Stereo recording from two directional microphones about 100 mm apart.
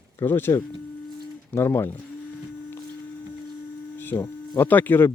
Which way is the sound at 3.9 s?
20° left (ahead or behind).